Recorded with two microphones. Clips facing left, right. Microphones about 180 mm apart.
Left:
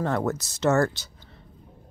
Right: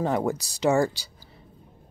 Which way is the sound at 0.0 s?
15° right (ahead or behind).